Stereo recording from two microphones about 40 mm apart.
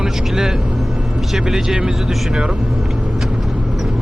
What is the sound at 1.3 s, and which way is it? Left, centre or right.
Speech, centre.